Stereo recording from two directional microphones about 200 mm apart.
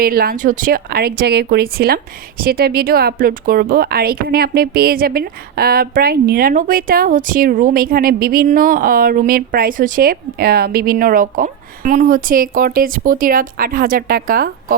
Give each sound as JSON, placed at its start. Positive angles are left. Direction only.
{"t": 0.0, "sound": "speech", "side_deg": -45}